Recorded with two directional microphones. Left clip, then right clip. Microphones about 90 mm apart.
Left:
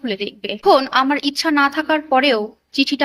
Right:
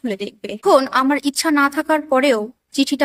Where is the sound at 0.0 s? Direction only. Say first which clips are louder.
Left 2 dB; 40° right (ahead or behind).